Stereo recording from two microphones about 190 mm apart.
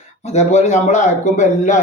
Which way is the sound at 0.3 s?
35° left (ahead or behind).